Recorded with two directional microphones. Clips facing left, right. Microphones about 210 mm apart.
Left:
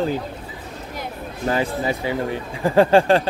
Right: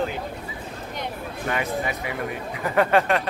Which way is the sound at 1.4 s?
30° left (ahead or behind).